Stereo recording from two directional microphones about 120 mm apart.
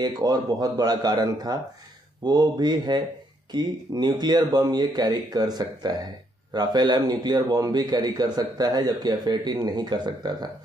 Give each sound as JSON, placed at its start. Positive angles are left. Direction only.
{"t": 0.0, "sound": "a man's voice", "side_deg": -35}